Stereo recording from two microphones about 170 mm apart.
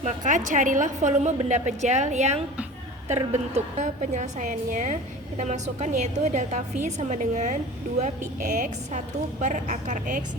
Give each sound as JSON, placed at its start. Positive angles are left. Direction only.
{"t": 0.0, "sound": "a woman's voice", "side_deg": -45}